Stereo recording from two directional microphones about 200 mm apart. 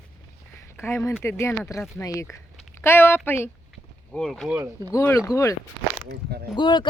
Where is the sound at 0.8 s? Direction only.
10° left (ahead or behind).